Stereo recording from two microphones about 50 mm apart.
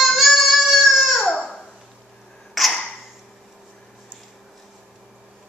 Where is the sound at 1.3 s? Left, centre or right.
Left.